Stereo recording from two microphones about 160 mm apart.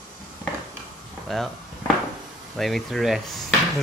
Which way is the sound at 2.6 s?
Centre (ahead or behind).